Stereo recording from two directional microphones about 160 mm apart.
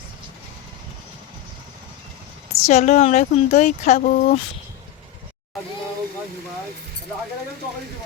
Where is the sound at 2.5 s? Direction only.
45° left (ahead or behind).